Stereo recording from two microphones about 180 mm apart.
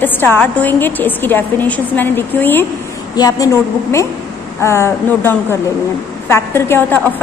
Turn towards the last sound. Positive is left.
turn(degrees=10)  # may be behind; listen again after turning